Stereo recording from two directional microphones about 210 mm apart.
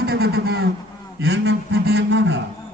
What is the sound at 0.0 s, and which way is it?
Speech, 50° right (ahead or behind).